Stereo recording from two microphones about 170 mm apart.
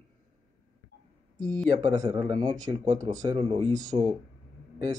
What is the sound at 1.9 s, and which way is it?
Speech, 20° right (ahead or behind).